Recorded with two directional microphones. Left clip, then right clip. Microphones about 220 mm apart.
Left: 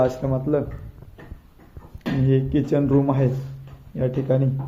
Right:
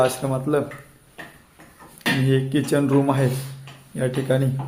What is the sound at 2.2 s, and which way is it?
A man's voice, 10° right (ahead or behind).